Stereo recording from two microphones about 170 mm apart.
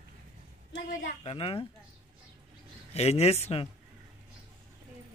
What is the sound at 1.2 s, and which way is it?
Speech, 30° left (ahead or behind).